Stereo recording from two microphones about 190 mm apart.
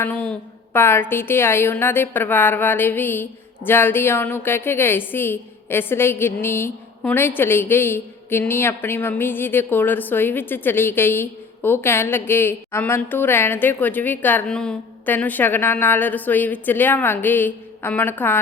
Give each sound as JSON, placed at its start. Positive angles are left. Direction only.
{"t": 0.0, "sound": "a woman's voice", "side_deg": 5}